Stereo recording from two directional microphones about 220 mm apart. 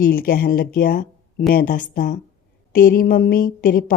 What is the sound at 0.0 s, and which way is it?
A woman's voice, 40° left (ahead or behind).